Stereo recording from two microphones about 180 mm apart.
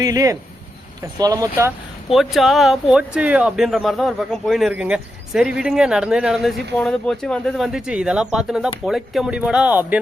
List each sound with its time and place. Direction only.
0.0 s speech: 20° right (ahead or behind)
2.1 s speech: centre (ahead or behind)